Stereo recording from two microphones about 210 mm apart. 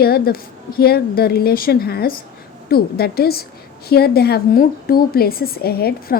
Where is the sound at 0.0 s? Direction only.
45° left (ahead or behind).